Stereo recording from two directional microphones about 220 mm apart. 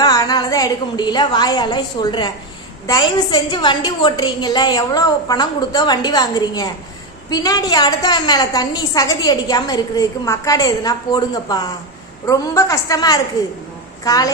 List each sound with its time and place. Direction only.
0.0 s a woman's voice: 15° left (ahead or behind)